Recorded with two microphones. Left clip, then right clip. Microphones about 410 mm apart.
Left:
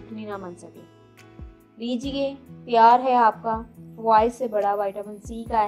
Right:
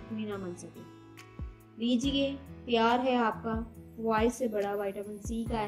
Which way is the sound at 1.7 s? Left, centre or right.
Centre.